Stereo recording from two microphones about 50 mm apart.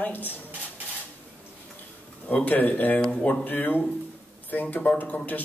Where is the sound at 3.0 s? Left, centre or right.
Left.